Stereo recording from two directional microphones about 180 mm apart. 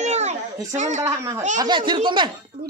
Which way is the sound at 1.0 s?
15° right (ahead or behind).